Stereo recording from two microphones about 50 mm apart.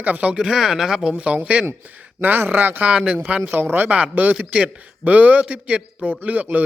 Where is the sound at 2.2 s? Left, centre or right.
Right.